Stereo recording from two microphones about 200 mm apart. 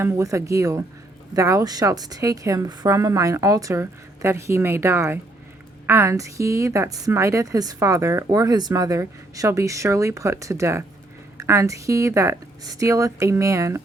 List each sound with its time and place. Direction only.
0.0 s a woman's voice: 15° right (ahead or behind)